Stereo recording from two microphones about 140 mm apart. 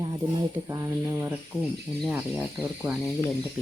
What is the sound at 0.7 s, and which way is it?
Speech, 20° right (ahead or behind).